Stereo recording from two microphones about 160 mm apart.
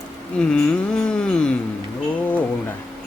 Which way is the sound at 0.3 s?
5° left (ahead or behind).